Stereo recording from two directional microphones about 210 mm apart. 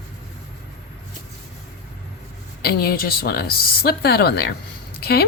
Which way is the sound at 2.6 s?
45° left (ahead or behind).